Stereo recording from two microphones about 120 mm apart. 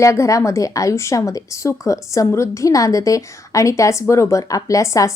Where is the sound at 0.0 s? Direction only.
25° left (ahead or behind).